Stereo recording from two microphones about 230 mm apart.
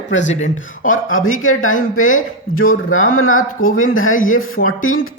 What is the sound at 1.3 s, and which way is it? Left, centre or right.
Speech, left.